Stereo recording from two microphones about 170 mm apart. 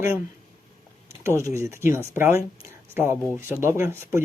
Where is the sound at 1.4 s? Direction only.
15° right (ahead or behind).